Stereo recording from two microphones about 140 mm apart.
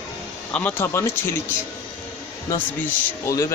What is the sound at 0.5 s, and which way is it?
Speech, 15° left (ahead or behind).